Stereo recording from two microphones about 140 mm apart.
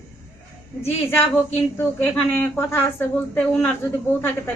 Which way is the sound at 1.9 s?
15° left (ahead or behind).